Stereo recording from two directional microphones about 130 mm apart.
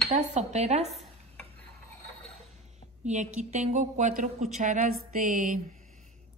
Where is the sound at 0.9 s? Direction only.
5° left (ahead or behind).